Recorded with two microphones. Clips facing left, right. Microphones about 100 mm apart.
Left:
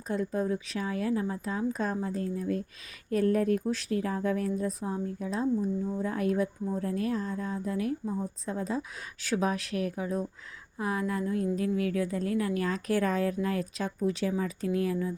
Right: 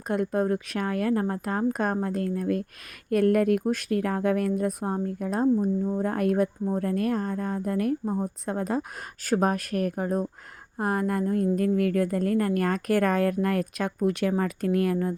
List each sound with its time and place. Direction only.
0.1 s a woman's voice: 60° right (ahead or behind)
3.6 s a woman's voice: 55° right (ahead or behind)
9.2 s a woman's voice: 50° right (ahead or behind)